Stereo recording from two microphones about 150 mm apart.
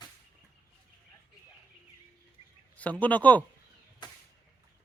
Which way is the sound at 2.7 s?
10° left (ahead or behind).